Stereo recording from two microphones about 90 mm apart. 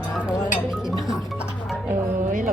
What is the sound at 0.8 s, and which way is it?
Speech, 5° right (ahead or behind).